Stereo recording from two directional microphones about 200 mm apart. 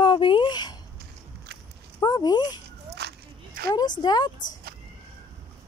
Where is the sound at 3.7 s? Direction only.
20° left (ahead or behind).